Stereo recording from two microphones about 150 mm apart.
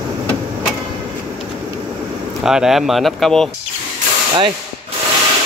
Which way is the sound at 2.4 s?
5° right (ahead or behind).